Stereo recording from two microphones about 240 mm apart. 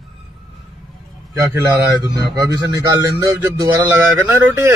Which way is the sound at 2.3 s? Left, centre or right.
Centre.